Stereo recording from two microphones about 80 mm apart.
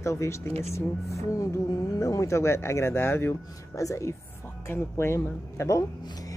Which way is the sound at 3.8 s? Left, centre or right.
Left.